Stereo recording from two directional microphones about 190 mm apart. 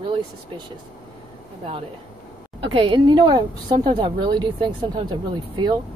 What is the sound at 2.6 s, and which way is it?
Speech, 25° right (ahead or behind).